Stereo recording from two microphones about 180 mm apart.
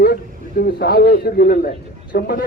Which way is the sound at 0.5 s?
60° left (ahead or behind).